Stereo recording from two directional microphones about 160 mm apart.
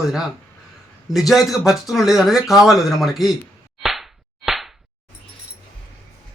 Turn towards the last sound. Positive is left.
turn(degrees=0)  # may be behind; listen again after turning